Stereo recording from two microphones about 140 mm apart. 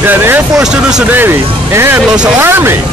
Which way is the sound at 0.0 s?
15° right (ahead or behind).